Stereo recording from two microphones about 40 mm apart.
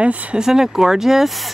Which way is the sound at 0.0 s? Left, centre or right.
Right.